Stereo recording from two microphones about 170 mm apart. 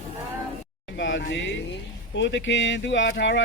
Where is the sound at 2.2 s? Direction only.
90° left.